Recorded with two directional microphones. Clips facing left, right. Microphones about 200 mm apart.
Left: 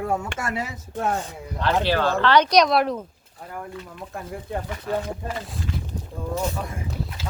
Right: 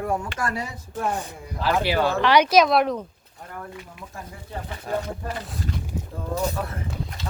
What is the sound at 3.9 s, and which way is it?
Speech, 55° left (ahead or behind).